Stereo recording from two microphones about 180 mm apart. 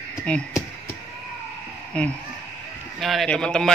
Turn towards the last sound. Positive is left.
turn(degrees=5)  # may be behind; listen again after turning